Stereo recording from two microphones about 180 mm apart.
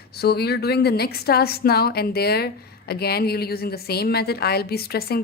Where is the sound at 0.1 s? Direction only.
60° left (ahead or behind).